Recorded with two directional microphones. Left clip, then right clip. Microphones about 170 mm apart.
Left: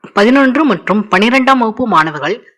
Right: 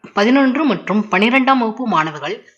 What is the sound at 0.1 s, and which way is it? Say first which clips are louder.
Speech: left 5 dB; 25° left (ahead or behind).